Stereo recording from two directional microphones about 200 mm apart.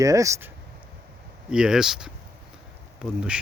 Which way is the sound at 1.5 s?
5° right (ahead or behind).